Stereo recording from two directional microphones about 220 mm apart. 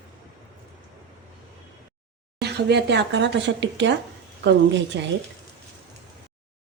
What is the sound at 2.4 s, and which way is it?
A woman's voice, 50° right (ahead or behind).